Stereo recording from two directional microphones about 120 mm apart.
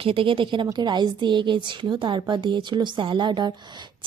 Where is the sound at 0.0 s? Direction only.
50° right (ahead or behind).